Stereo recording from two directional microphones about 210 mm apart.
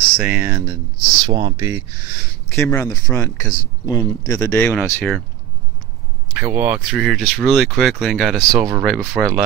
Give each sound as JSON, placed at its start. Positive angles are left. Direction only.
{"t": 0.2, "sound": "speech", "side_deg": -10}
{"t": 2.5, "sound": "speech", "side_deg": 15}
{"t": 6.3, "sound": "speech", "side_deg": -10}